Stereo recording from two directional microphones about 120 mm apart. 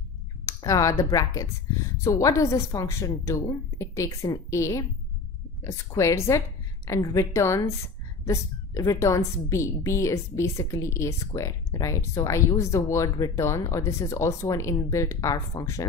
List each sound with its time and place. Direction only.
0.5 s a woman's voice: 30° left (ahead or behind)